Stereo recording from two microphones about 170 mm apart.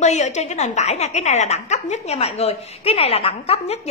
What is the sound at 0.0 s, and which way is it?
A woman's voice, 45° left (ahead or behind).